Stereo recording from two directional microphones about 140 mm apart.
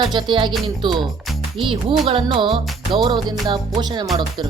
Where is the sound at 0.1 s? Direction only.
35° right (ahead or behind).